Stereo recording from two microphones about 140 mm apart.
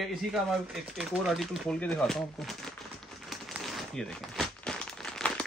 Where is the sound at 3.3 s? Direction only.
Centre (ahead or behind).